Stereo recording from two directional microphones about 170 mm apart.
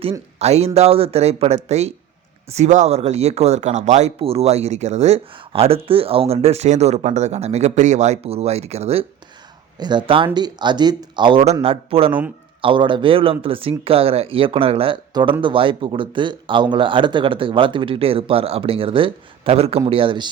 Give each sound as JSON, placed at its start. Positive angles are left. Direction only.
{"t": 0.3, "sound": "speech", "side_deg": -40}
{"t": 9.7, "sound": "speech", "side_deg": -25}